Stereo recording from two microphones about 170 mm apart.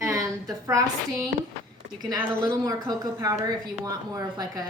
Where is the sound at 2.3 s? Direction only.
20° right (ahead or behind).